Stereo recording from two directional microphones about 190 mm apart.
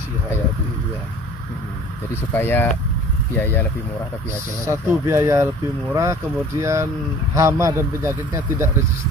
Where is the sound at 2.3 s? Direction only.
10° left (ahead or behind).